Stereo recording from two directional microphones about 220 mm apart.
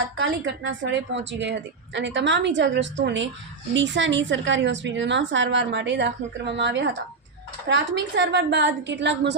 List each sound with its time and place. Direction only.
0.2 s a woman's voice: 55° right (ahead or behind)